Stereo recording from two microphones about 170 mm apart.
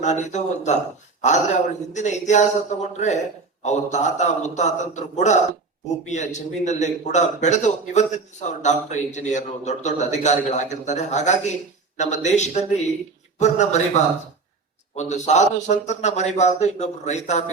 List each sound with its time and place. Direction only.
0.0 s a man's voice: 45° left (ahead or behind)
1.9 s a man's voice: 45° left (ahead or behind)